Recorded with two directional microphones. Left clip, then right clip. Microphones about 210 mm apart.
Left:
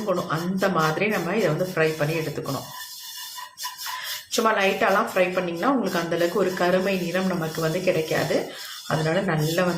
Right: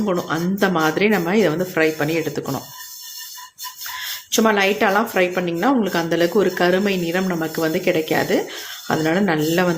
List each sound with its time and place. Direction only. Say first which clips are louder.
0.1 s speech: right 1 dB; 45° right (ahead or behind)
4.3 s speech: right 4 dB; 40° right (ahead or behind)